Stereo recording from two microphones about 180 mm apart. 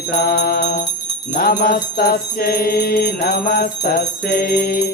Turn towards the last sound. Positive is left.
turn(degrees=55)  # may be behind; listen again after turning